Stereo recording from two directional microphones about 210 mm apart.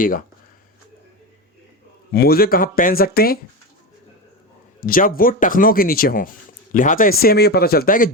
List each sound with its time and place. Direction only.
2.1 s speech: 45° left (ahead or behind)
4.8 s speech: 40° left (ahead or behind)